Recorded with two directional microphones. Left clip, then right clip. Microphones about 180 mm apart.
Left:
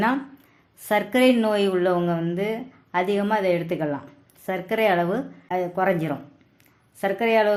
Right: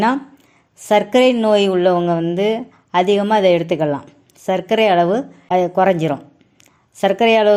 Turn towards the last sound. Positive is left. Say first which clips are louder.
# right 8 dB
turn(degrees=-35)  # may be behind; listen again after turning